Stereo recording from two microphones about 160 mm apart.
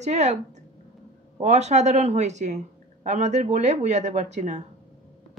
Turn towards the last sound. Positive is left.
turn(degrees=-45)  # may be behind; listen again after turning